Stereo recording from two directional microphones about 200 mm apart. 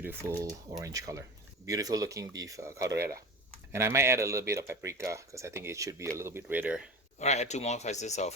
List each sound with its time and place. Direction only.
0.2 s speech: 15° right (ahead or behind)
7.2 s speech: 35° left (ahead or behind)